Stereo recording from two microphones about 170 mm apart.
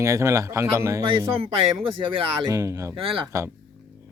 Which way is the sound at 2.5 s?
20° right (ahead or behind).